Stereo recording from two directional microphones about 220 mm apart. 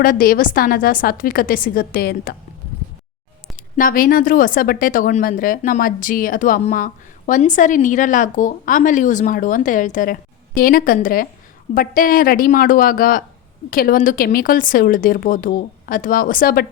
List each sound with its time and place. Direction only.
0.0 s speech: 40° left (ahead or behind)
3.8 s speech: 40° left (ahead or behind)